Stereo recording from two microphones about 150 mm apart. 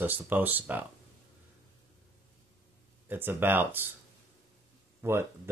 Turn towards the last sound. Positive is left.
turn(degrees=-15)  # may be behind; listen again after turning